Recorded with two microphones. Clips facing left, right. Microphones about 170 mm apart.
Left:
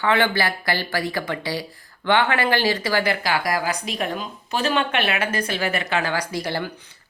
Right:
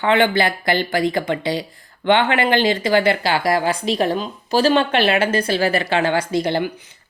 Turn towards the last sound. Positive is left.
turn(degrees=-20)  # may be behind; listen again after turning